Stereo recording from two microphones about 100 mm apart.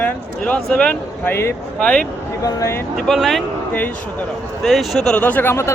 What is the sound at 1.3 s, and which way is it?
A man's voice, 25° left (ahead or behind).